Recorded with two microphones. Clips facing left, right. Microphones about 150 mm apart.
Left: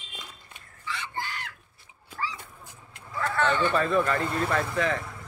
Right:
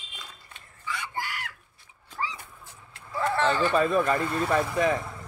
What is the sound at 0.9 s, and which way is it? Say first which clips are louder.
Chicken: right 1 dB; 10° right (ahead or behind).